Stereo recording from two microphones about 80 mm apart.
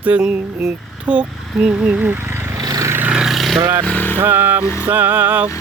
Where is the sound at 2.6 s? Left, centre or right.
Right.